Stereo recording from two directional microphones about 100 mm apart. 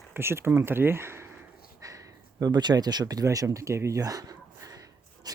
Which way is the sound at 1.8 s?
35° right (ahead or behind).